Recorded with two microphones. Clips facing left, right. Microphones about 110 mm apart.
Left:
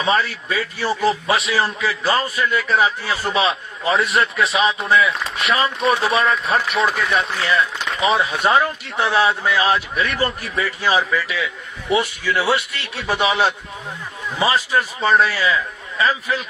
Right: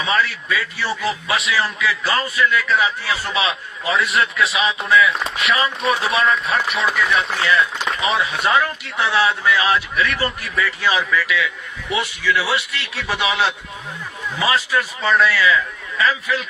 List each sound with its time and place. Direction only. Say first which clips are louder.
0.0 s a man's voice: left 1 dB; 35° left (ahead or behind)
4.4 s speech: left 1 dB; centre (ahead or behind)
4.9 s a man's voice: right 1 dB; 35° left (ahead or behind)
5.8 s speech: left 3 dB; centre (ahead or behind)
7.1 s a man's voice: right 1 dB; 40° left (ahead or behind)
7.8 s a sound: left 2 dB; centre (ahead or behind)
8.2 s a man's voice: left 1 dB; 40° left (ahead or behind)